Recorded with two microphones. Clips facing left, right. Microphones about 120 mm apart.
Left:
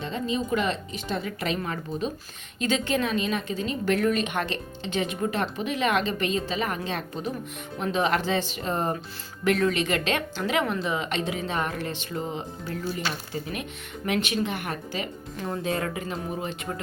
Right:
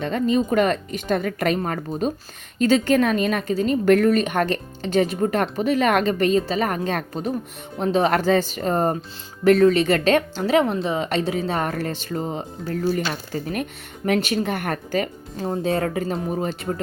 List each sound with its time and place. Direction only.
0.0 s speech: 55° right (ahead or behind)
7.8 s a woman's voice: 35° right (ahead or behind)
15.4 s a woman's voice: 30° right (ahead or behind)